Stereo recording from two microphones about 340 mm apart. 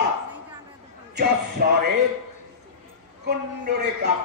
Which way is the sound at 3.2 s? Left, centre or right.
Right.